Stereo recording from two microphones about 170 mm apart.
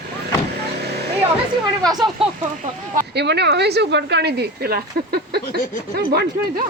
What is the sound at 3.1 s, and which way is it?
Speech, 80° right.